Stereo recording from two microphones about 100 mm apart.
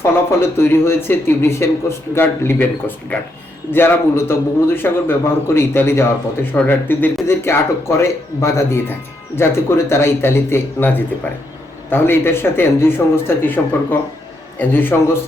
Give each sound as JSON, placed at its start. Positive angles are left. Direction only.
{"t": 0.0, "sound": "speech", "side_deg": 25}
{"t": 14.6, "sound": "speech", "side_deg": 20}